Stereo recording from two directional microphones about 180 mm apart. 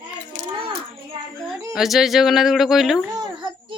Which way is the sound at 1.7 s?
Centre (ahead or behind).